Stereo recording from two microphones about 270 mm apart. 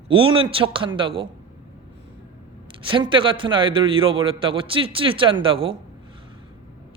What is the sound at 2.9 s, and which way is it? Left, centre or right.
A man's voice, centre.